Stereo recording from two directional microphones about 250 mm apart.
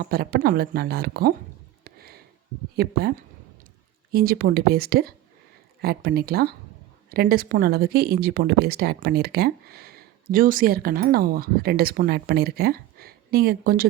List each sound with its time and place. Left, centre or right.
0.0 s speech: right
1.8 s a sound: right
2.7 s speech: right
4.1 s speech: right